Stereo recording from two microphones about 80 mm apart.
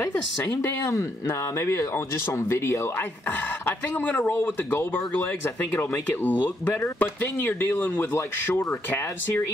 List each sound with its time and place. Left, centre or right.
0.0 s speech: left